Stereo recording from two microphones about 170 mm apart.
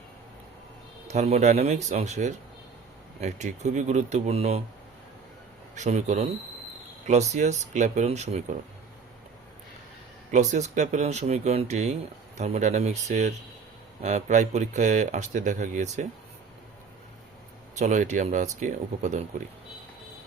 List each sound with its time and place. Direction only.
1.0 s speech: 40° right (ahead or behind)
5.7 s speech: 45° right (ahead or behind)
10.3 s speech: 45° right (ahead or behind)
17.7 s speech: 45° right (ahead or behind)